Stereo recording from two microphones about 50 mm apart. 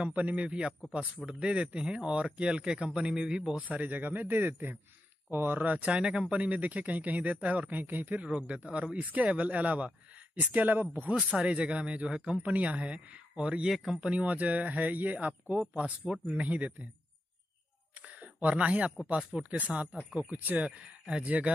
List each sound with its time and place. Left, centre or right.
0.0 s speech: right
3.6 s speech: right
5.6 s speech: right
5.9 s speech: centre
7.8 s speech: right
11.1 s speech: right
13.7 s speech: centre
14.0 s speech: right
18.0 s a sound: right
19.3 s speech: centre
19.7 s speech: right
20.2 s speech: right